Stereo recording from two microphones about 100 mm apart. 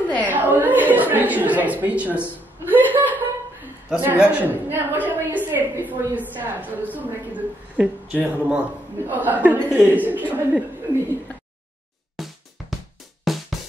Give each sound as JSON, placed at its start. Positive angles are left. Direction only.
{"t": 0.3, "sound": "a sound", "side_deg": -15}
{"t": 0.9, "sound": "a woman's voice", "side_deg": -15}
{"t": 2.9, "sound": "chuckle", "side_deg": -15}
{"t": 3.9, "sound": "a woman's voice", "side_deg": -15}
{"t": 12.2, "sound": "music", "side_deg": 0}